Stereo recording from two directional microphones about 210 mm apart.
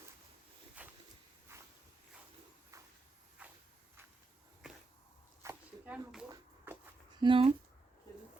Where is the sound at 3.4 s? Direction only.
10° right (ahead or behind).